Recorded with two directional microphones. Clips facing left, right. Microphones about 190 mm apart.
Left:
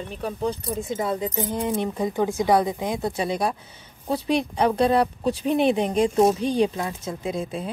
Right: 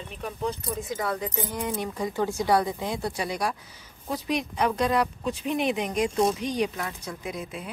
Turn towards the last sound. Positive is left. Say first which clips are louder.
# left 7 dB
turn(degrees=30)  # may be behind; listen again after turning